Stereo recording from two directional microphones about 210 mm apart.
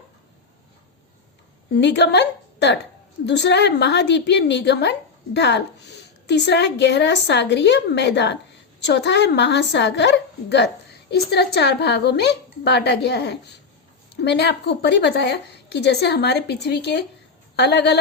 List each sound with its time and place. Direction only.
1.7 s a woman's voice: 55° left (ahead or behind)